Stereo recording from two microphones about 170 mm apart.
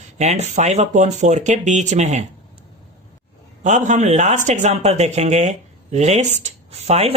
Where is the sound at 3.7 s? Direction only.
45° right (ahead or behind).